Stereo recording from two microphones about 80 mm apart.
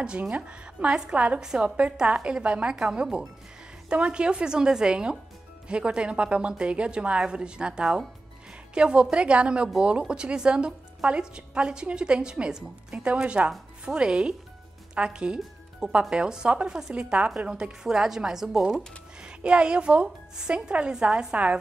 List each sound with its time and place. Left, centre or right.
0.0 s speech: centre